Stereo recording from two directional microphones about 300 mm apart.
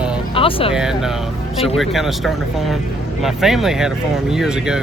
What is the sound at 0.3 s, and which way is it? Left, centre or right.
Music, centre.